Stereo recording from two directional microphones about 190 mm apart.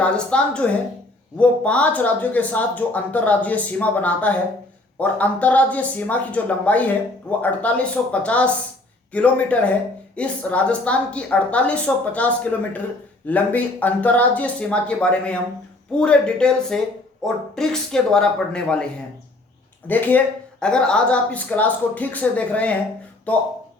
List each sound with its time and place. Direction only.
0.0 s speech: 5° left (ahead or behind)
19.9 s speech: 10° left (ahead or behind)